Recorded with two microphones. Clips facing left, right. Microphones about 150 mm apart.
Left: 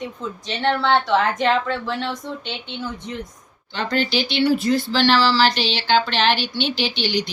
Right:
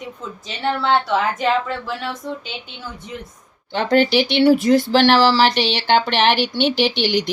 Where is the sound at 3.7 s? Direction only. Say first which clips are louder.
Right 6 dB; 60° right (ahead or behind).